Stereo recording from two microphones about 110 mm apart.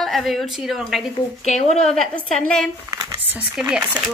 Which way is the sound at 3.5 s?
10° right (ahead or behind).